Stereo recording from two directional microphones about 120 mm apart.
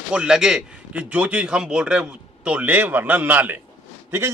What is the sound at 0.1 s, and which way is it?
A man's voice, 5° right (ahead or behind).